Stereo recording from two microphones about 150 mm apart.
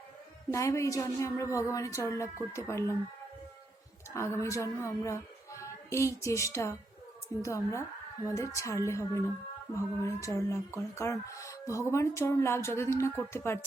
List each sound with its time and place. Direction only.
0.5 s speech: 20° left (ahead or behind)
4.1 s speech: 20° left (ahead or behind)